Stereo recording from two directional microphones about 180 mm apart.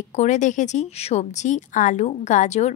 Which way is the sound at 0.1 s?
40° left (ahead or behind).